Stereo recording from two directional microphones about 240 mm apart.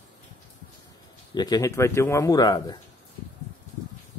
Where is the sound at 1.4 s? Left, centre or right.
Centre.